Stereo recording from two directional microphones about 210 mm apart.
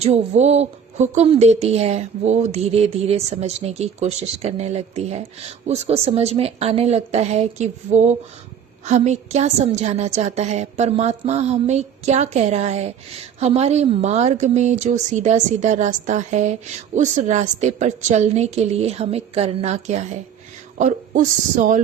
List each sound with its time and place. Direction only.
0.0 s a woman's voice: 30° right (ahead or behind)